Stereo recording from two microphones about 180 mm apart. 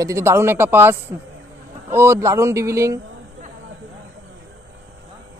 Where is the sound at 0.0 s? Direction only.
15° right (ahead or behind).